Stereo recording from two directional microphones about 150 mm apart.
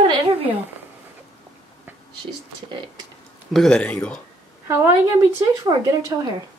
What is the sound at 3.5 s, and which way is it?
Speech, 5° left (ahead or behind).